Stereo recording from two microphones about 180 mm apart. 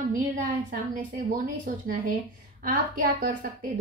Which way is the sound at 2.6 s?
50° right (ahead or behind).